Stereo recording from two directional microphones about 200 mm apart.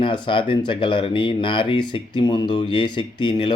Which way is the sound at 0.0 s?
25° left (ahead or behind).